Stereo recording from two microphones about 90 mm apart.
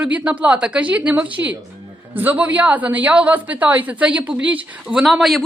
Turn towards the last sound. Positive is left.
turn(degrees=0)  # may be behind; listen again after turning